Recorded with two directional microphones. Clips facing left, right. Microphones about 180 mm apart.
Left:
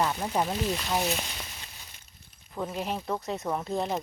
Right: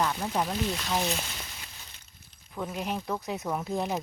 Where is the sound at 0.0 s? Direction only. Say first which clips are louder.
Left 1 dB; 10° left (ahead or behind).